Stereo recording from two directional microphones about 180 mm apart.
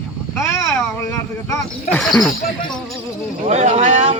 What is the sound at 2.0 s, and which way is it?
Speech, 5° left (ahead or behind).